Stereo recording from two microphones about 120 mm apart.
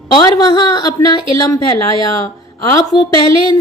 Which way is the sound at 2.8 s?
30° left (ahead or behind).